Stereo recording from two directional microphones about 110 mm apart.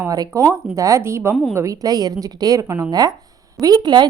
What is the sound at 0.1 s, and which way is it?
A woman's voice, 30° right (ahead or behind).